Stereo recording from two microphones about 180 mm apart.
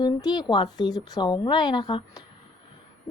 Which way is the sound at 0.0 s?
25° left (ahead or behind).